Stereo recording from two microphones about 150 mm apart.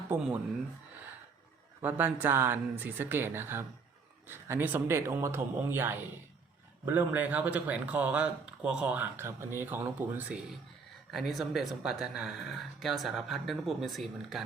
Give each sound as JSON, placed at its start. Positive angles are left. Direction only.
{"t": 0.1, "sound": "speech", "side_deg": -10}
{"t": 1.8, "sound": "speech", "side_deg": -10}